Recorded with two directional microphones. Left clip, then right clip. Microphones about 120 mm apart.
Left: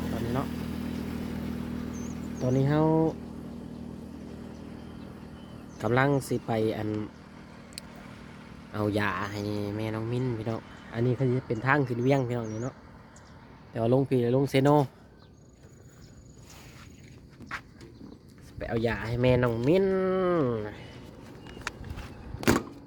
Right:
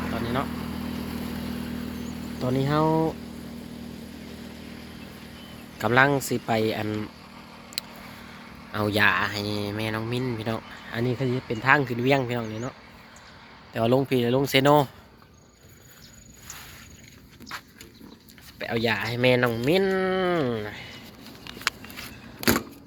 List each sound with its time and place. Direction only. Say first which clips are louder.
0.0 s vehicle: right 4 dB; 25° left (ahead or behind)
2.4 s speech: right 2 dB; 5° left (ahead or behind)
4.2 s vehicle: right 3 dB; 35° left (ahead or behind)
5.7 s speech: right 5 dB; 5° right (ahead or behind)
7.9 s vehicle: right 5 dB; 30° left (ahead or behind)
8.7 s speech: right 7 dB; 5° left (ahead or behind)
13.7 s speech: right 3 dB; 10° right (ahead or behind)
17.5 s dog: even; 25° right (ahead or behind)
18.6 s speech: right 4 dB; 5° left (ahead or behind)
22.4 s a sound: right 2 dB; 10° right (ahead or behind)